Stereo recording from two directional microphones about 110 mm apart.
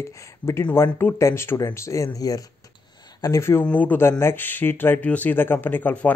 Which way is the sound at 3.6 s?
15° left (ahead or behind).